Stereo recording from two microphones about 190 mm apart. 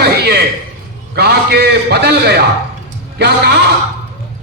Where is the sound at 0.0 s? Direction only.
60° right (ahead or behind).